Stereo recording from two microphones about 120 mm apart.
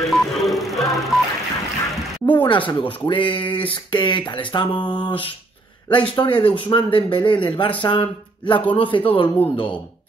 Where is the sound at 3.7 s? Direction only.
40° left (ahead or behind).